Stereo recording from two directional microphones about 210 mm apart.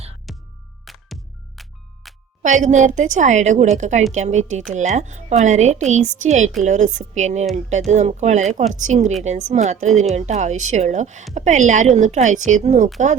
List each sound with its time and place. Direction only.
0.3 s music: centre (ahead or behind)
2.4 s a woman's voice: 35° right (ahead or behind)